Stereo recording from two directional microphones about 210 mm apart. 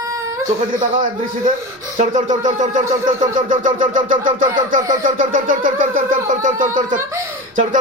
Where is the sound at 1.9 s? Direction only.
35° right (ahead or behind).